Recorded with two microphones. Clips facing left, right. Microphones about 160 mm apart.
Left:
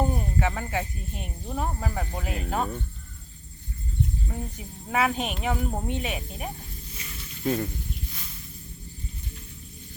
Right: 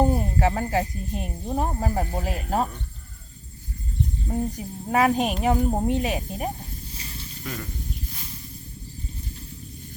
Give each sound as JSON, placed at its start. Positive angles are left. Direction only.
{"t": 0.1, "sound": "speech", "side_deg": -35}
{"t": 4.3, "sound": "speech", "side_deg": -40}
{"t": 6.9, "sound": "snake", "side_deg": -30}
{"t": 7.4, "sound": "speech", "side_deg": 30}